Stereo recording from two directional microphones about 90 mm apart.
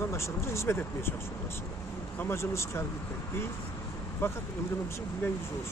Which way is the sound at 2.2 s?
30° left (ahead or behind).